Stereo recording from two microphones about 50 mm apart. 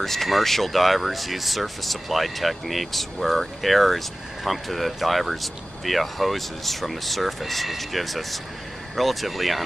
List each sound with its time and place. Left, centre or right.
0.0 s speech: centre